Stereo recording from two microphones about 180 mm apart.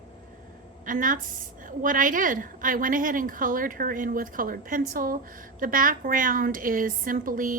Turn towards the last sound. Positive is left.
turn(degrees=-50)  # may be behind; listen again after turning